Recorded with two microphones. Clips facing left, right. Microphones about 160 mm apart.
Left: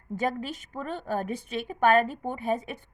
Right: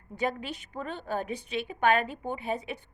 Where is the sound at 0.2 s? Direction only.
45° left (ahead or behind).